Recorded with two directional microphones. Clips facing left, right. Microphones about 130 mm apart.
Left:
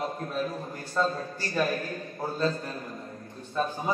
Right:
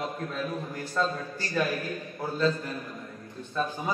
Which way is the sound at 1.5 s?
35° left (ahead or behind).